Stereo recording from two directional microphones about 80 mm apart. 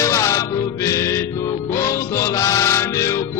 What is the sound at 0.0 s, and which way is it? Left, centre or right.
Music, left.